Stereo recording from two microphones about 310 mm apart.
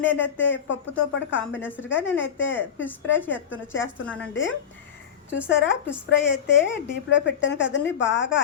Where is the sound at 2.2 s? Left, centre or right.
Left.